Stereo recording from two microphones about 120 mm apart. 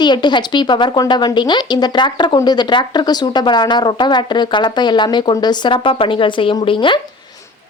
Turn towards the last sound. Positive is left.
turn(degrees=45)  # may be behind; listen again after turning